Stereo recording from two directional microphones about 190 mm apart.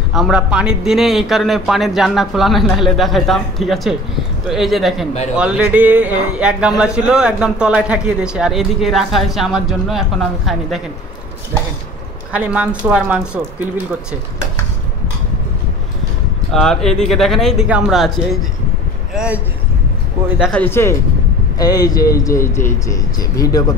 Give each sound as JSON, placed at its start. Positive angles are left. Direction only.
{"t": 0.1, "sound": "speech", "side_deg": -5}
{"t": 12.3, "sound": "speech", "side_deg": -5}
{"t": 16.5, "sound": "speech", "side_deg": 0}
{"t": 20.6, "sound": "speech", "side_deg": 10}